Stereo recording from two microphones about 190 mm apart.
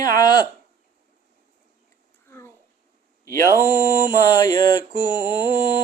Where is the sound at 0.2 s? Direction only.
20° left (ahead or behind).